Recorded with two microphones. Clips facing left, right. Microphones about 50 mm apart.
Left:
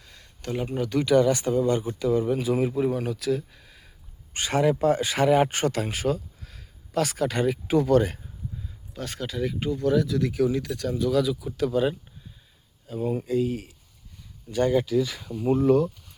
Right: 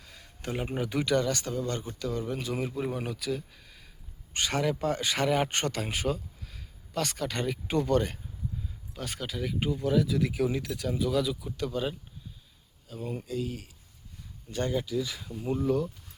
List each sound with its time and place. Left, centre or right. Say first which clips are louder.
0.0 s a sound: even; centre
0.4 s speech: left 4 dB; centre
1.0 s speech: left 10 dB; centre
13.2 s speech: left 9 dB; left
14.6 s speech: left 8 dB; left